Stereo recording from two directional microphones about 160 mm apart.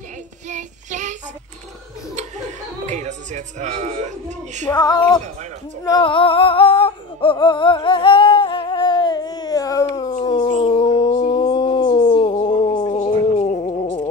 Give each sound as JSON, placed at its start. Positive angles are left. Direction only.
{"t": 0.5, "sound": "child singing", "side_deg": -50}
{"t": 2.1, "sound": "chuckle", "side_deg": -45}
{"t": 4.6, "sound": "female singing", "side_deg": 25}
{"t": 5.9, "sound": "music", "side_deg": 30}
{"t": 10.2, "sound": "a sound", "side_deg": 30}
{"t": 12.9, "sound": "a sound", "side_deg": 40}